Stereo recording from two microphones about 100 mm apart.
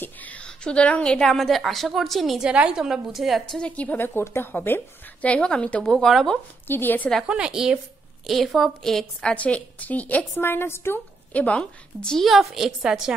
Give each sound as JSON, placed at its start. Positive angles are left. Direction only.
{"t": 0.0, "sound": "a woman's voice", "side_deg": 15}
{"t": 6.7, "sound": "speech", "side_deg": 20}
{"t": 7.2, "sound": "a woman's voice", "side_deg": -10}